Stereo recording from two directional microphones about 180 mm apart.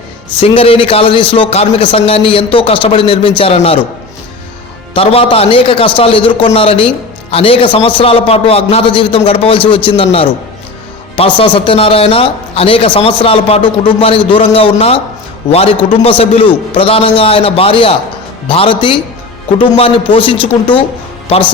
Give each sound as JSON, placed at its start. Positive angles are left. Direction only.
{"t": 0.3, "sound": "a man's voice", "side_deg": 30}
{"t": 4.9, "sound": "a man's voice", "side_deg": 30}
{"t": 11.3, "sound": "a man's voice", "side_deg": 30}